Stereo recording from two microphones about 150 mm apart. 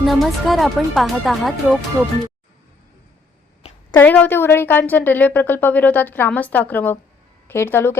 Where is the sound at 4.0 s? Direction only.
10° left (ahead or behind).